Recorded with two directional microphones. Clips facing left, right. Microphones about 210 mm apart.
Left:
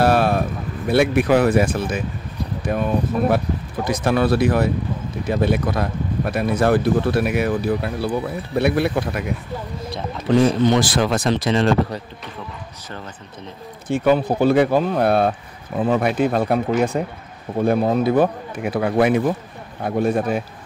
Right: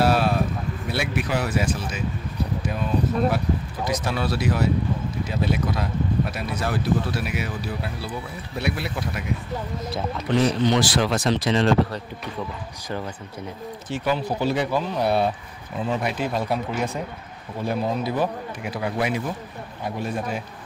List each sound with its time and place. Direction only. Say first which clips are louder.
0.0 s a sound: left 4 dB; 55° left (ahead or behind)
0.8 s speech: left 11 dB; 55° left (ahead or behind)
10.4 s speech: left 3 dB; 50° left (ahead or behind)
13.9 s speech: left 8 dB; 55° left (ahead or behind)